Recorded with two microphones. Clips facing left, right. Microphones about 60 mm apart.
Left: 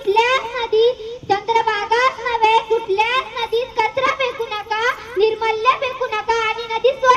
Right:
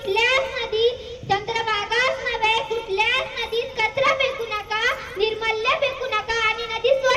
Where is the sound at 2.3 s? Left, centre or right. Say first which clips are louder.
Left 7 dB; left.